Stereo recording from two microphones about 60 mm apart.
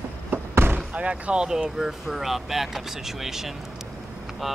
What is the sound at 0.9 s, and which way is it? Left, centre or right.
Speech, right.